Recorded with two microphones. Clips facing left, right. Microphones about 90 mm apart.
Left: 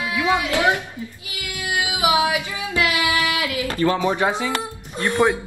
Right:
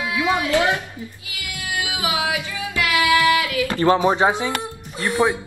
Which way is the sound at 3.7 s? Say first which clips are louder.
Right 4 dB; 30° right (ahead or behind).